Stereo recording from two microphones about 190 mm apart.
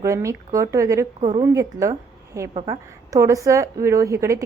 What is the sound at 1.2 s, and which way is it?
Speech, 30° right (ahead or behind).